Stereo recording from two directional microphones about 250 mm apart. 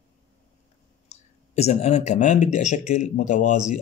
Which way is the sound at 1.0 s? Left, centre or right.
Left.